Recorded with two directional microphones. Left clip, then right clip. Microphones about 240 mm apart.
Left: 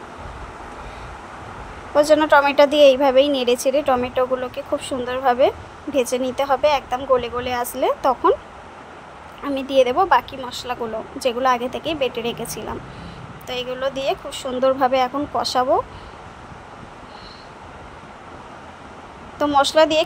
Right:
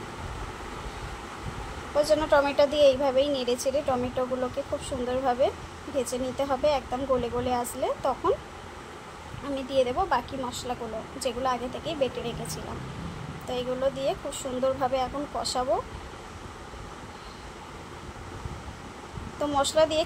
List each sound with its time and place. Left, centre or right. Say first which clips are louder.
2.0 s a woman's voice: left 8 dB; left
9.6 s a woman's voice: left 9 dB; left
19.4 s a woman's voice: left 8 dB; left